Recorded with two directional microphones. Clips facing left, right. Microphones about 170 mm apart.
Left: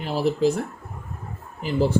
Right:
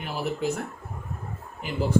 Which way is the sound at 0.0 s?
35° left (ahead or behind).